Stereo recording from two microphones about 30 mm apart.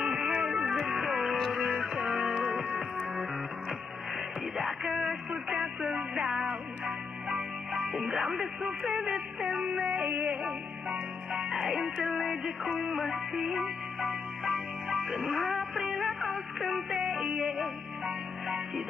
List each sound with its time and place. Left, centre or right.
0.0 s music: right
4.6 s music: centre
5.0 s a sound: right
7.7 s music: centre
8.3 s speech: centre
11.3 s music: centre
12.1 s music: centre
15.2 s music: centre
16.3 s a sound: centre
17.2 s music: centre
17.6 s music: centre